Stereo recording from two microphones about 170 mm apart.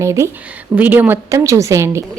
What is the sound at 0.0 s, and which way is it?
A woman's voice, 15° right (ahead or behind).